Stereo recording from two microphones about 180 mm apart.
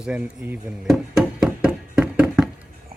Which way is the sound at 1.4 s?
5° right (ahead or behind).